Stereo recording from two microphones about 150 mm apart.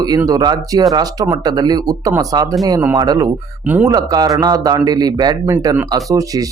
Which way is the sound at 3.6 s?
10° right (ahead or behind).